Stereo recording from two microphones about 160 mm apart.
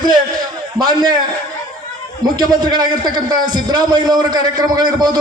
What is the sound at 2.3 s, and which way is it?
A man's voice, 25° right (ahead or behind).